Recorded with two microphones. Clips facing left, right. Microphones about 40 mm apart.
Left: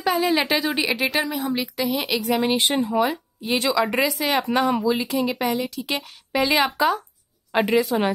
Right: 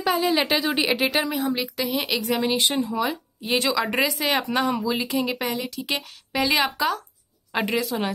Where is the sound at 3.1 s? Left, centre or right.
Centre.